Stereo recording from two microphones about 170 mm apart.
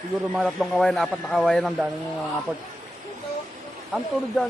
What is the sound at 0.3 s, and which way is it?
Speech, centre (ahead or behind).